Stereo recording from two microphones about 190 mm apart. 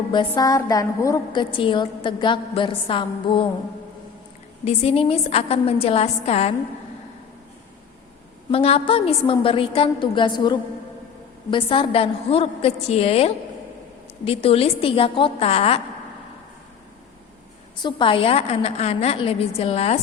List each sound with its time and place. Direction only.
0.1 s a woman's voice: 20° left (ahead or behind)
4.6 s a woman's voice: 35° left (ahead or behind)
8.4 s a woman's voice: 30° left (ahead or behind)
17.8 s a woman's voice: 25° left (ahead or behind)